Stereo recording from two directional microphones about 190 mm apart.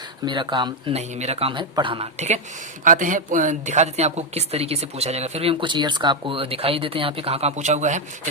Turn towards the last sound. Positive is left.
turn(degrees=-40)  # may be behind; listen again after turning